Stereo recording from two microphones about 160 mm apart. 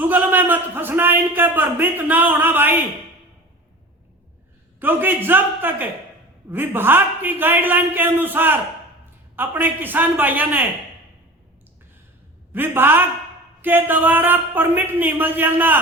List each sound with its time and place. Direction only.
0.0 s a man's voice: 10° right (ahead or behind)
4.8 s a man's voice: 10° right (ahead or behind)
12.5 s a man's voice: 15° right (ahead or behind)